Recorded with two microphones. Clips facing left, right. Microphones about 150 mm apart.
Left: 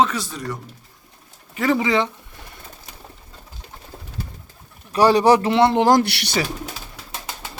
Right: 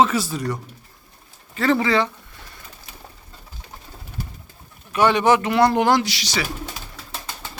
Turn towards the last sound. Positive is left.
turn(degrees=60)  # may be behind; listen again after turning